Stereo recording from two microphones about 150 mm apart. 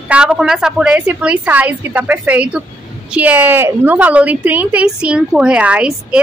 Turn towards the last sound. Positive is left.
turn(degrees=-5)  # may be behind; listen again after turning